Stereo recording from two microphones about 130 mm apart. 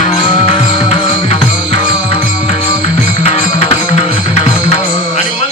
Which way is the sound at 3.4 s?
70° left (ahead or behind).